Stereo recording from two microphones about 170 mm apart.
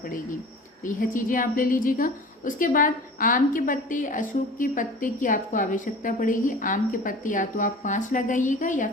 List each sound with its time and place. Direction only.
1.1 s a woman's voice: 50° left (ahead or behind)